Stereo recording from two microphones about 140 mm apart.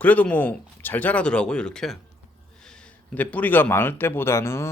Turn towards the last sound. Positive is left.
turn(degrees=20)  # may be behind; listen again after turning